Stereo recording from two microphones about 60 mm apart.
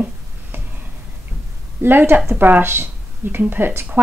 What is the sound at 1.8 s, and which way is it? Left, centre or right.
A woman's voice, right.